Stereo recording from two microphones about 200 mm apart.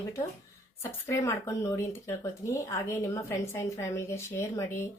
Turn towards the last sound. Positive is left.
turn(degrees=15)  # may be behind; listen again after turning